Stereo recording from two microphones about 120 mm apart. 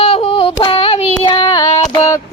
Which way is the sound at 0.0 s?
55° left (ahead or behind).